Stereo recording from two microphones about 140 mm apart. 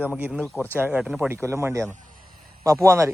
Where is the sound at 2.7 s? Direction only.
20° right (ahead or behind).